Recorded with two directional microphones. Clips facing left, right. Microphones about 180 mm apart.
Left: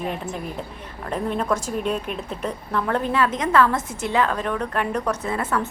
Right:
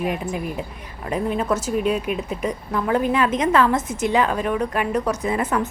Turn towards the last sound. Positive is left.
turn(degrees=-20)  # may be behind; listen again after turning